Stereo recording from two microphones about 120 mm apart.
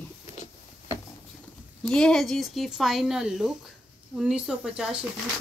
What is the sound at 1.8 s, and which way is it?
Speech, 5° left (ahead or behind).